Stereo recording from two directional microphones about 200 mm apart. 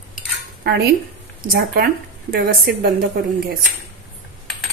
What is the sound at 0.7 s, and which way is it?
A woman's voice, 50° right (ahead or behind).